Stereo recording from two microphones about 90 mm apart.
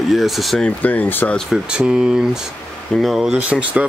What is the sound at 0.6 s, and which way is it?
Speech, 15° left (ahead or behind).